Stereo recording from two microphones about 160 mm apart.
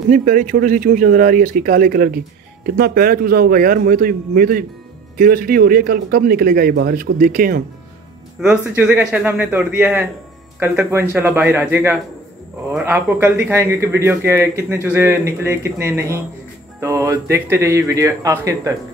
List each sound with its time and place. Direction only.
0.1 s a man's voice: 60° right (ahead or behind)
8.4 s speech: 5° right (ahead or behind)